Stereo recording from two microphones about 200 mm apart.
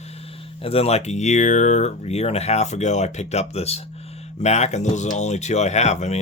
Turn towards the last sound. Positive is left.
turn(degrees=35)  # may be behind; listen again after turning